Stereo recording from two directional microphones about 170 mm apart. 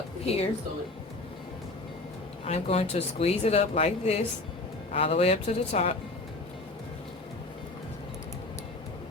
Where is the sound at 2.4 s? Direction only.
35° left (ahead or behind).